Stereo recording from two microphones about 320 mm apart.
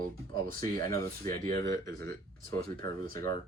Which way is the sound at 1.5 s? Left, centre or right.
Centre.